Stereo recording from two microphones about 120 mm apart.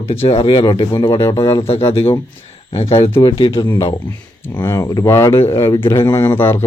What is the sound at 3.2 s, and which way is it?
Speech, 35° left (ahead or behind).